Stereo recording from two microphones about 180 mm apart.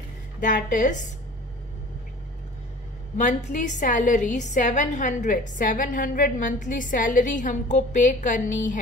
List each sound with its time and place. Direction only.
0.4 s a woman's voice: 45° left (ahead or behind)
3.2 s a woman's voice: 45° left (ahead or behind)